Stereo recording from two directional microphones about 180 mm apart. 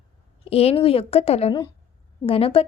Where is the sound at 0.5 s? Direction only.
35° left (ahead or behind).